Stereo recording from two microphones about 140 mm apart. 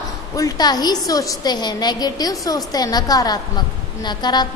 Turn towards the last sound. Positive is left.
turn(degrees=30)  # may be behind; listen again after turning